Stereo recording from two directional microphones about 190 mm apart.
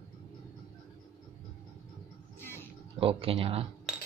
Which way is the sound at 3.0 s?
30° right (ahead or behind).